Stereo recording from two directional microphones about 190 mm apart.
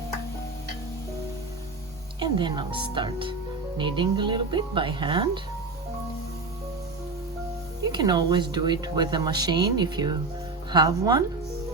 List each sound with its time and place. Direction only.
2.1 s speech: 25° right (ahead or behind)
7.9 s speech: 20° right (ahead or behind)